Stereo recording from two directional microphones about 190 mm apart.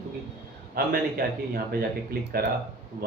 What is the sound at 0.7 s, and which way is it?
Speech, 55° right (ahead or behind).